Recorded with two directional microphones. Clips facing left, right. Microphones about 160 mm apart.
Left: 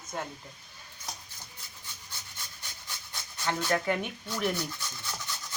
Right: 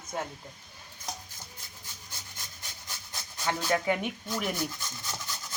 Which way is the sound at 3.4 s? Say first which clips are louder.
Right 1 dB; 10° right (ahead or behind).